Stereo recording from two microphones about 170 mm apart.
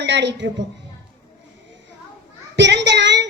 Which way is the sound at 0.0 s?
90° right.